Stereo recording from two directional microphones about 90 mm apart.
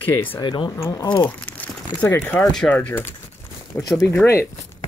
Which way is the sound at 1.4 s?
20° left (ahead or behind).